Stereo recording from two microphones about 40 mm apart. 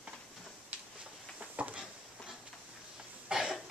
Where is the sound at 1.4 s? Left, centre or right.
Right.